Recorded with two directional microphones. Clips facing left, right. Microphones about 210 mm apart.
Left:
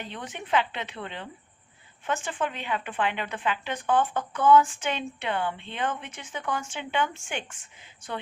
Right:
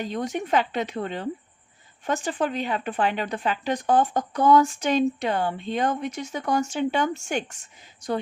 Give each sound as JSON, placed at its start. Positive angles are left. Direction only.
{"t": 0.0, "sound": "speech", "side_deg": -40}